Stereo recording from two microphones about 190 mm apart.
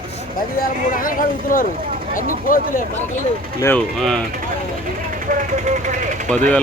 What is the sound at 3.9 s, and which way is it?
Speech, 5° left (ahead or behind).